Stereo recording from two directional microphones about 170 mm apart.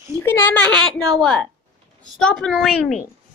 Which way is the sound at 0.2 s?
15° left (ahead or behind).